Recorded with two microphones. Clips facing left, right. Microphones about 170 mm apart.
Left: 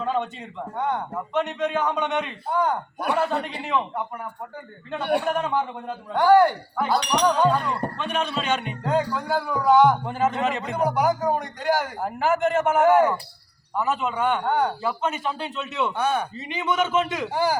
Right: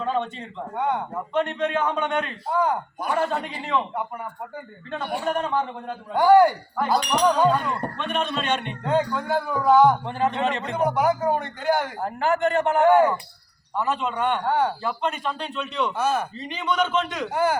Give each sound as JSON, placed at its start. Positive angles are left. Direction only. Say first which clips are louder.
{"t": 0.0, "sound": "a man's voice", "louder": "even", "side_deg": 5}
{"t": 0.8, "sound": "speech", "louder": "right 1 dB", "side_deg": -10}
{"t": 1.3, "sound": "speech", "louder": "right 1 dB", "side_deg": 5}
{"t": 3.6, "sound": "speech", "louder": "even", "side_deg": 5}
{"t": 5.3, "sound": "a man's voice", "louder": "even", "side_deg": 5}
{"t": 6.1, "sound": "speech", "louder": "right 1 dB", "side_deg": -10}
{"t": 6.7, "sound": "speech", "louder": "even", "side_deg": 5}
{"t": 16.4, "sound": "a man's voice", "louder": "even", "side_deg": 10}